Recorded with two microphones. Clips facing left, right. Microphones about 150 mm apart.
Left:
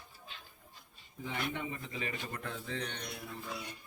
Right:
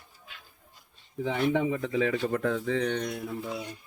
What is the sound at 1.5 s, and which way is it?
Speech, 90° right.